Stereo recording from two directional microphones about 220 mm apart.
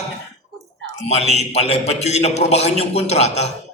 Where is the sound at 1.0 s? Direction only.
30° left (ahead or behind).